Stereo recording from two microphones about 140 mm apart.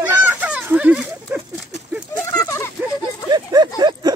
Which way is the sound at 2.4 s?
20° left (ahead or behind).